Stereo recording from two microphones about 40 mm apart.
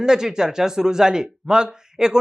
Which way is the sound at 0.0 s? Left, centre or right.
Centre.